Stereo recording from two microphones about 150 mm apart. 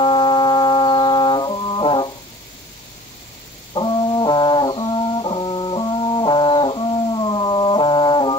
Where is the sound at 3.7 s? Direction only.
30° left (ahead or behind).